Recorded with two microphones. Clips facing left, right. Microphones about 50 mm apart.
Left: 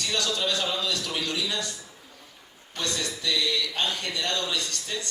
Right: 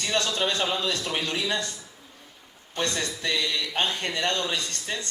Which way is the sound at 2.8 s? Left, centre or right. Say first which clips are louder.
Right 3 dB; right.